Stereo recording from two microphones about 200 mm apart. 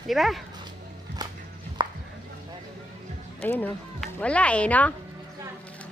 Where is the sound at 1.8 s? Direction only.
20° right (ahead or behind).